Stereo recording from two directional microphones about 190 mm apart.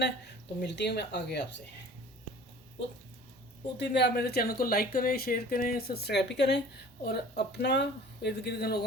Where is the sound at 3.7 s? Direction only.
60° left (ahead or behind).